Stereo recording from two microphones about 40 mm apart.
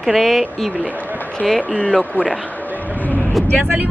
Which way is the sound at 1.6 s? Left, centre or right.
Left.